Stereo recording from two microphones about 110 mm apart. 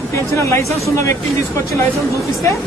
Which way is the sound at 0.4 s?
25° left (ahead or behind).